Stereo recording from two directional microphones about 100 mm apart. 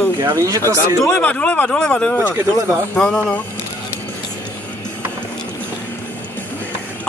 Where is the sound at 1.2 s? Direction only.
15° left (ahead or behind).